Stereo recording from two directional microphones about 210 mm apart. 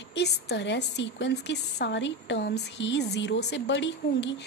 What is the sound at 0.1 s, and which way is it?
A woman's voice, 50° left (ahead or behind).